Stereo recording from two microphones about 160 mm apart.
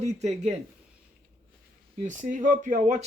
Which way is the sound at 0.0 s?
45° right (ahead or behind).